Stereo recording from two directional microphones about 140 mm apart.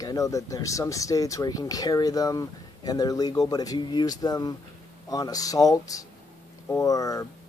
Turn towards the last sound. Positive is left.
turn(degrees=25)  # may be behind; listen again after turning